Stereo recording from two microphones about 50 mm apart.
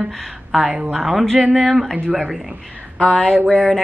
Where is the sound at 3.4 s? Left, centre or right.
Centre.